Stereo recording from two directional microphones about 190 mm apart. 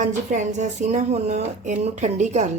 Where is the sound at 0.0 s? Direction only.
40° right (ahead or behind).